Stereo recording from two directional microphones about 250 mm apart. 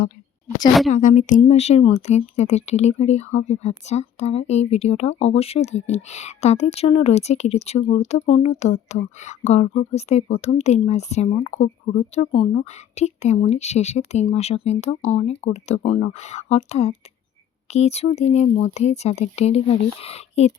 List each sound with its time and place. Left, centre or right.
0.9 s speech: left